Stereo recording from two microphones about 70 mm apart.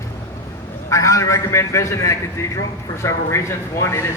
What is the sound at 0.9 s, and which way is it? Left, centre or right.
Speech, left.